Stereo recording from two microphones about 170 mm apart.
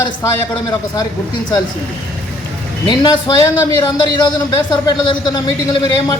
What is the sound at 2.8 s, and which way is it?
A man's voice, 25° left (ahead or behind).